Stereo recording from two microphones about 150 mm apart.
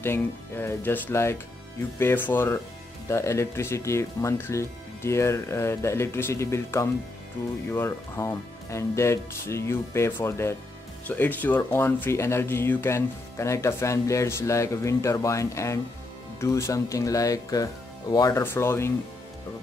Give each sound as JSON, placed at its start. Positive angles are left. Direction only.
{"t": 0.0, "sound": "speech", "side_deg": 15}